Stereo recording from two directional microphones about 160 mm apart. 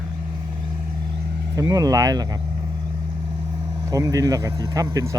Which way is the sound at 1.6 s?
20° right (ahead or behind).